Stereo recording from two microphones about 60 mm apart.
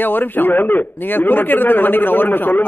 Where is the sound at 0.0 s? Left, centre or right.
Left.